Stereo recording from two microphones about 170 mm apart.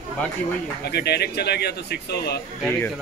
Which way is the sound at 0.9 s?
70° left (ahead or behind).